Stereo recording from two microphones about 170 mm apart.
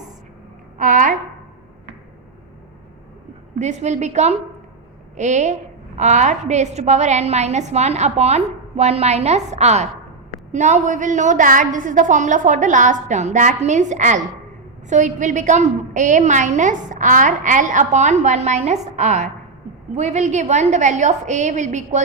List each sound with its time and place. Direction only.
0.8 s a woman's voice: 45° right (ahead or behind)
3.6 s a woman's voice: 40° right (ahead or behind)